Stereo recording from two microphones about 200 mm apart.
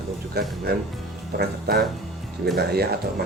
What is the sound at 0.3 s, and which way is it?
Speech, 55° right (ahead or behind).